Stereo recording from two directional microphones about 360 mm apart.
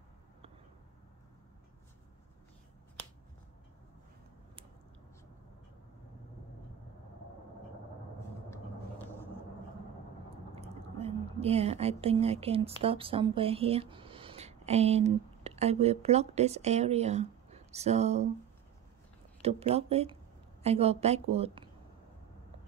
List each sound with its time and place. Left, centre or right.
10.5 s a sound: centre
12.8 s speech: centre
19.4 s a woman's voice: centre